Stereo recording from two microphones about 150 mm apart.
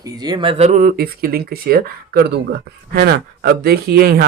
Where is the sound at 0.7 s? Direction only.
70° right (ahead or behind); by 4.3 s 90° right.